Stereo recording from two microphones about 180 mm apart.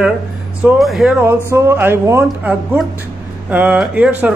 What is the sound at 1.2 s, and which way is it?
Speech, 15° right (ahead or behind).